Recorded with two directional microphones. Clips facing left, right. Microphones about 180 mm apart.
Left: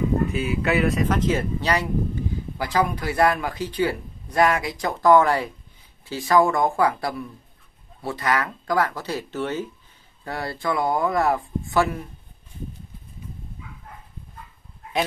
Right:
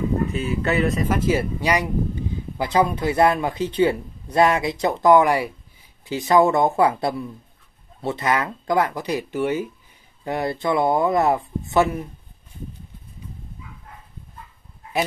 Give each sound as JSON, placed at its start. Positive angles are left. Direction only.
{"t": 0.3, "sound": "speech", "side_deg": 0}